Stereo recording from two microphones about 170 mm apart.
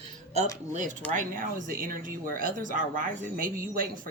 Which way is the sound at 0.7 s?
50° right (ahead or behind).